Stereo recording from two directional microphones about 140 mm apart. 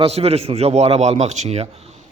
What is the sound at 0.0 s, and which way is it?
A man's voice, 45° right (ahead or behind).